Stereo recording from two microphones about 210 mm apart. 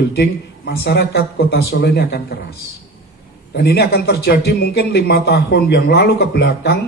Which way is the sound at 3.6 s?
50° left (ahead or behind).